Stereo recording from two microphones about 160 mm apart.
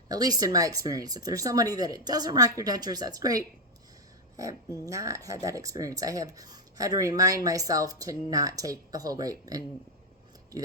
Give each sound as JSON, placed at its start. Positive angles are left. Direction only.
{"t": 0.1, "sound": "speech", "side_deg": -25}